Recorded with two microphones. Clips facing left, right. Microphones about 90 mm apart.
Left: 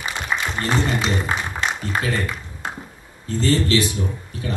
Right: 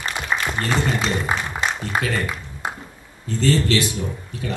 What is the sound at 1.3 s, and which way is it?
Music, 15° right (ahead or behind).